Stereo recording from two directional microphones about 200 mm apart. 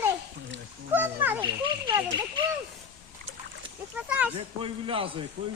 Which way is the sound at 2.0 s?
20° right (ahead or behind).